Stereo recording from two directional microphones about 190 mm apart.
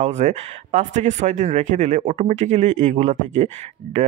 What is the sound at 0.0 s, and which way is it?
Speech, 35° right (ahead or behind).